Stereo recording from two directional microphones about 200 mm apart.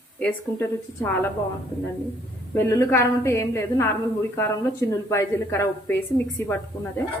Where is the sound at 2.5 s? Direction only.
15° left (ahead or behind).